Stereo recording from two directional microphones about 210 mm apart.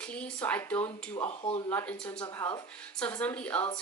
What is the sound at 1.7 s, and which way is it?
A woman's voice, 10° left (ahead or behind).